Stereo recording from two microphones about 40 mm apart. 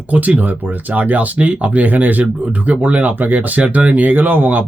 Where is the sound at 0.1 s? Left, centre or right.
Right.